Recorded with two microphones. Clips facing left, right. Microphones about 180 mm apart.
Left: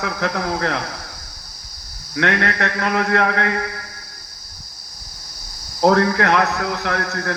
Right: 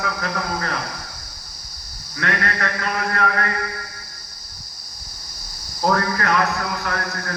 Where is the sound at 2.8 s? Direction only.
70° left (ahead or behind).